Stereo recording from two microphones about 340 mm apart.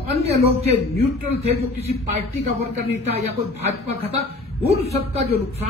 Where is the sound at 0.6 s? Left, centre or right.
Centre.